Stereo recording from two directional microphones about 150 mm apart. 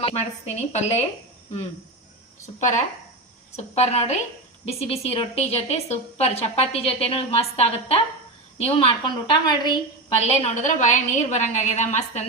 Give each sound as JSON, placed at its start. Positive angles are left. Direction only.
{"t": 0.0, "sound": "a woman's voice", "side_deg": 45}
{"t": 2.6, "sound": "a woman's voice", "side_deg": 55}
{"t": 10.2, "sound": "a woman's voice", "side_deg": 45}